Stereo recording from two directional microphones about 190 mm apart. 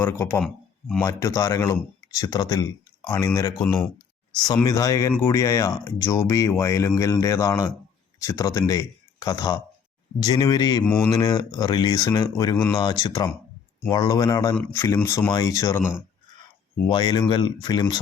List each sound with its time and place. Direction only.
0.0 s speech: 10° left (ahead or behind)
4.6 s speech: 15° left (ahead or behind)
10.8 s speech: 5° left (ahead or behind)
11.1 s speech: 20° left (ahead or behind)
16.9 s speech: 25° left (ahead or behind)